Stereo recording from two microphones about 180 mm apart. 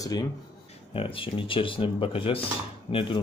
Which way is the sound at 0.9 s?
30° left (ahead or behind).